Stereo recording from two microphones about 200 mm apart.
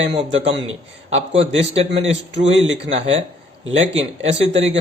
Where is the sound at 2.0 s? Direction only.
65° right (ahead or behind).